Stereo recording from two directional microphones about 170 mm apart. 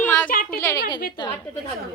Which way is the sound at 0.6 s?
15° left (ahead or behind).